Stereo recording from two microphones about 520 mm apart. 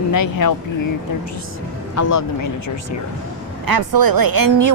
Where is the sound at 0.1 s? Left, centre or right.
Left.